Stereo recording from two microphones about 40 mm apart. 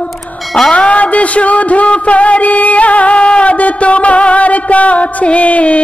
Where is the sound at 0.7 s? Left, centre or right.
Left.